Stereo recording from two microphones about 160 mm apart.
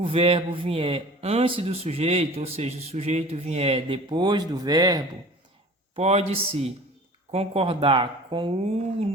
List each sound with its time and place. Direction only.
0.0 s a man's voice: 35° right (ahead or behind)
6.0 s a man's voice: 40° right (ahead or behind)